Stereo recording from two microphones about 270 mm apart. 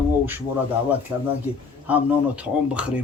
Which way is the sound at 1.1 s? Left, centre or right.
Centre.